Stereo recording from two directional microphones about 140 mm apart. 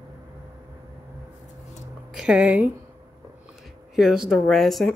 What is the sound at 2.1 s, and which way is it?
Speech, 10° right (ahead or behind).